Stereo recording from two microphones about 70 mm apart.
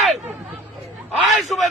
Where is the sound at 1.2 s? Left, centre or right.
Centre.